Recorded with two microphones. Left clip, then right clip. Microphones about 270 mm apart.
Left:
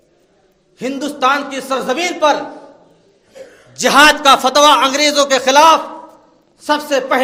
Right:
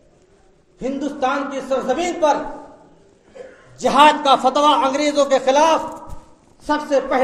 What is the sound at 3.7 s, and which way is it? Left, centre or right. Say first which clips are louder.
A man's voice: left 4 dB; left.